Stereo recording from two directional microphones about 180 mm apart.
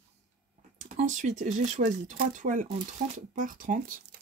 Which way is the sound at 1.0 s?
45° right (ahead or behind).